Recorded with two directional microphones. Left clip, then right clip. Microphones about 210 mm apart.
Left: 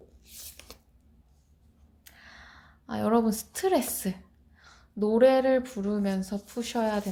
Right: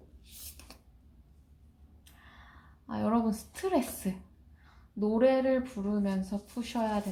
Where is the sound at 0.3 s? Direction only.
25° left (ahead or behind).